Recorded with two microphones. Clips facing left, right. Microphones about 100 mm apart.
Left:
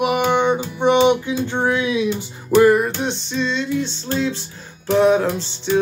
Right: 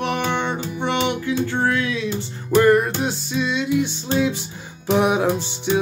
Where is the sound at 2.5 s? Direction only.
5° left (ahead or behind).